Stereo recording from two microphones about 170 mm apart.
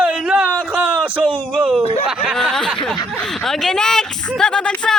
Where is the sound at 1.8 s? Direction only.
40° left (ahead or behind).